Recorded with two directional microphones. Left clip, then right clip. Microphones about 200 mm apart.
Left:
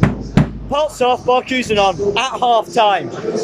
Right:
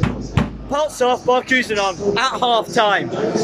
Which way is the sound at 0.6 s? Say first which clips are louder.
Left 2 dB; 10° left (ahead or behind).